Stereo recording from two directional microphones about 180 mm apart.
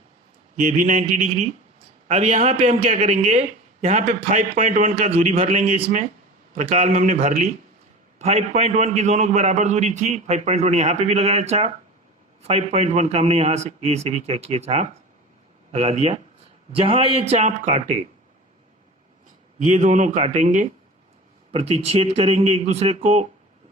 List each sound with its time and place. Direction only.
0.5 s a man's voice: 45° right (ahead or behind)
4.9 s a man's voice: 35° right (ahead or behind)
19.5 s a man's voice: 45° right (ahead or behind)